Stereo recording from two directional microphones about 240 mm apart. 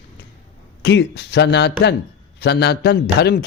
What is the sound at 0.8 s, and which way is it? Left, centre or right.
A man's voice, left.